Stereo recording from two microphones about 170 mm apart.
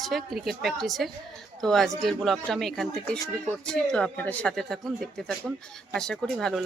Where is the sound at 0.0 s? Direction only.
Centre (ahead or behind).